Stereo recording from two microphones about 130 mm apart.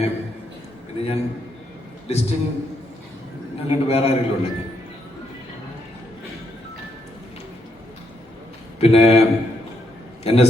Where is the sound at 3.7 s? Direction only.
50° left (ahead or behind).